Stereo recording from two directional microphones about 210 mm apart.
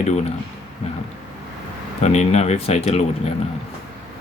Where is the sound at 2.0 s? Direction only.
30° left (ahead or behind).